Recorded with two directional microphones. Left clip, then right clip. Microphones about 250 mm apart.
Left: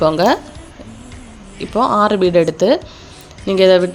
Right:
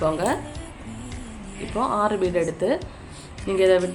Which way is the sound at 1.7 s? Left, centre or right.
Left.